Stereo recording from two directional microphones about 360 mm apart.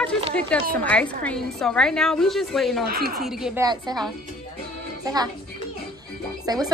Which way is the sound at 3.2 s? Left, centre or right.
Centre.